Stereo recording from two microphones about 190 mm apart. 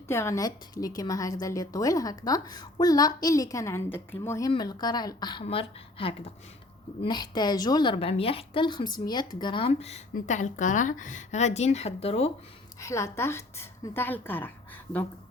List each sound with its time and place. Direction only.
0.1 s a woman's voice: 15° left (ahead or behind); by 12.3 s 30° left (ahead or behind)
12.8 s a woman's voice: 15° left (ahead or behind)